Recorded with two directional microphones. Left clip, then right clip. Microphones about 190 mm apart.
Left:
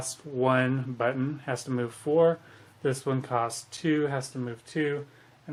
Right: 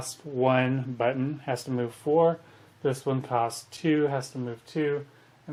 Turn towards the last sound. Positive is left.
turn(degrees=0)  # may be behind; listen again after turning